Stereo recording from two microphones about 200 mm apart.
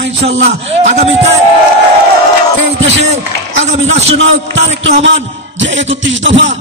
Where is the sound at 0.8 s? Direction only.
35° right (ahead or behind).